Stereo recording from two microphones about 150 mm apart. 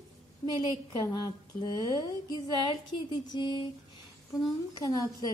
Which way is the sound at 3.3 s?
30° left (ahead or behind).